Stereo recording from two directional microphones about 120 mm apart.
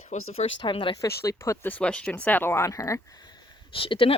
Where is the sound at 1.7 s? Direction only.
10° left (ahead or behind).